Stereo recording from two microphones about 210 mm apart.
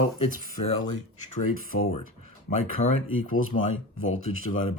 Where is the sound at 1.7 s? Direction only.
90° left.